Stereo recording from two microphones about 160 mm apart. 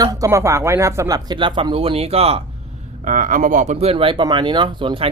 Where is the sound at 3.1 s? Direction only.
55° right (ahead or behind).